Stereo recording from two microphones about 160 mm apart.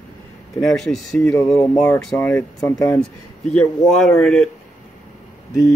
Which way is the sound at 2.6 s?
25° left (ahead or behind).